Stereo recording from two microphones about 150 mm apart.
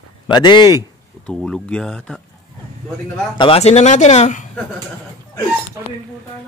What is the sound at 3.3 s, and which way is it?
Speech, 40° left (ahead or behind).